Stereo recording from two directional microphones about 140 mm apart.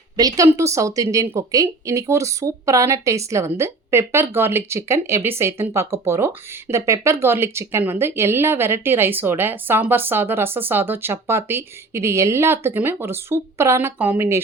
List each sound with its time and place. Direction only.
0.2 s a woman's voice: 25° right (ahead or behind)